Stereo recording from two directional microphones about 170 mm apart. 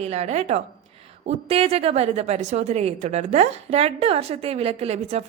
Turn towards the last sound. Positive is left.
turn(degrees=-35)  # may be behind; listen again after turning